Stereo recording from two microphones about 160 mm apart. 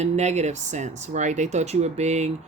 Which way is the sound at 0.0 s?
45° right (ahead or behind).